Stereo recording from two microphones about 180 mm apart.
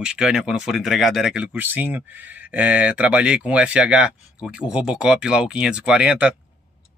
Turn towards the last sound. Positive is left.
turn(degrees=-5)  # may be behind; listen again after turning